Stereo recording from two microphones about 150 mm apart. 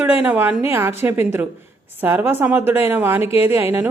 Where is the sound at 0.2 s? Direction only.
15° right (ahead or behind).